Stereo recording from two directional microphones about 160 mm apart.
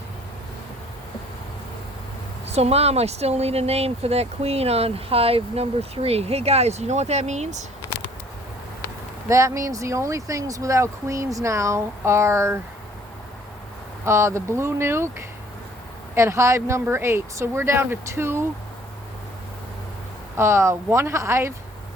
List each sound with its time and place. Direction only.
2.5 s speech: 40° right (ahead or behind)
9.3 s speech: 20° right (ahead or behind)
14.0 s speech: 15° right (ahead or behind)
16.1 s speech: 15° right (ahead or behind)
20.3 s speech: 15° right (ahead or behind)